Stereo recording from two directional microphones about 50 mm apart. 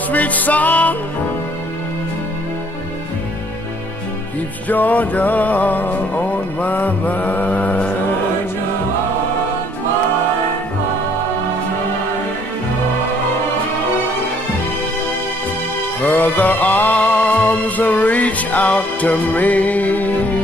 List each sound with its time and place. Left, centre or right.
0.1 s music: left
4.6 s music: left
16.0 s music: left